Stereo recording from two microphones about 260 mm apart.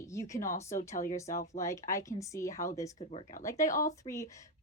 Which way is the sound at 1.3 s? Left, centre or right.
Left.